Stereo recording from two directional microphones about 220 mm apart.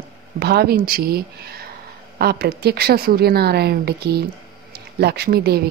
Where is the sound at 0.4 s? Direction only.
45° right (ahead or behind).